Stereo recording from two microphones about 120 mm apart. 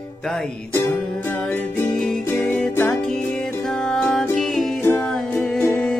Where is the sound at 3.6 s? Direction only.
5° left (ahead or behind).